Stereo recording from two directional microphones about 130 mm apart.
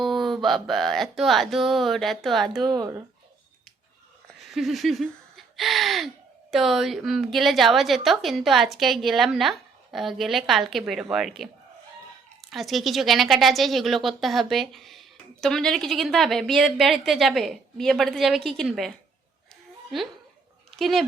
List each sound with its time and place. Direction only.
0.0 s a sound: centre (ahead or behind)
0.4 s a woman's voice: centre (ahead or behind)
2.6 s speech: 30° right (ahead or behind)
4.4 s a woman's voice: centre (ahead or behind)
20.7 s dog: centre (ahead or behind)